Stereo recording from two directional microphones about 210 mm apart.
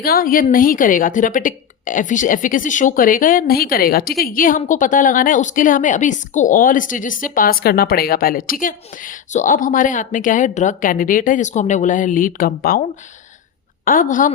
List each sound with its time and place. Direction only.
0.0 s a woman's voice: 45° left (ahead or behind)
13.8 s a woman's voice: 40° left (ahead or behind)